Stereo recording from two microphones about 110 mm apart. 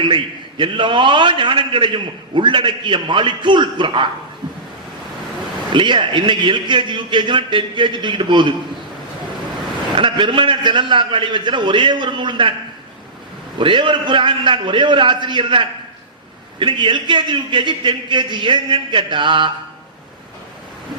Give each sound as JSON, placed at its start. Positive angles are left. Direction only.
{"t": 0.0, "sound": "a man's voice", "side_deg": -50}
{"t": 5.7, "sound": "a man's voice", "side_deg": -50}
{"t": 9.9, "sound": "a man's voice", "side_deg": -50}
{"t": 13.6, "sound": "a man's voice", "side_deg": -50}